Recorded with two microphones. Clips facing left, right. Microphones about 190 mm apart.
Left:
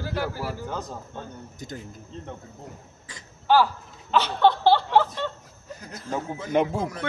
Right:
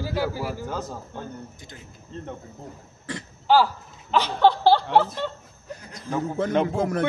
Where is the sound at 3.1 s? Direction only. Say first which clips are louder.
Right 14 dB; 65° right (ahead or behind).